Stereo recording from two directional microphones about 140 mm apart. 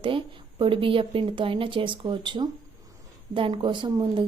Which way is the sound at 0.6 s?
40° right (ahead or behind).